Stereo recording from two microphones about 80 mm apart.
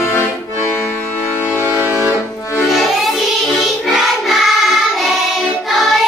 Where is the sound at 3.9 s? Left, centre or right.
Centre.